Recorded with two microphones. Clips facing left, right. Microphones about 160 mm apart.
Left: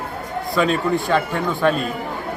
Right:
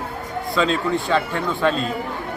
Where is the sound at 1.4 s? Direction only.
10° left (ahead or behind).